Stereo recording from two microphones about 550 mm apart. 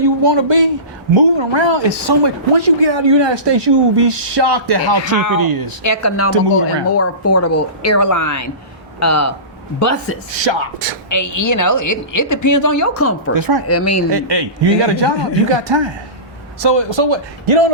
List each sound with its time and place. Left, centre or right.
0.0 s speech: right
5.1 s a woman's voice: left
5.4 s speech: right
5.8 s speech: left
10.4 s a man's voice: right
11.1 s a woman's voice: left
13.3 s speech: right
13.7 s speech: left
14.1 s a man's voice: right